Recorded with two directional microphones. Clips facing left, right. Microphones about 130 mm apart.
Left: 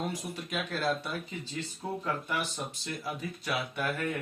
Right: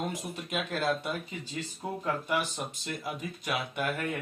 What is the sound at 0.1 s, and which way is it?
Speech, 20° right (ahead or behind).